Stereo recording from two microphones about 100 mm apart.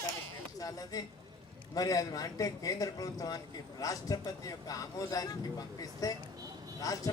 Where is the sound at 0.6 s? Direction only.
40° left (ahead or behind).